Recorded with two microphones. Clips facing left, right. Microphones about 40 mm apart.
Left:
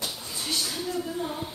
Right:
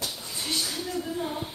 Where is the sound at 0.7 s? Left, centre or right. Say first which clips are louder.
Left 1 dB; centre.